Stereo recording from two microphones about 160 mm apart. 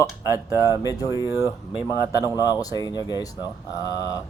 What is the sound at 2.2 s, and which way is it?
Speech, 25° left (ahead or behind).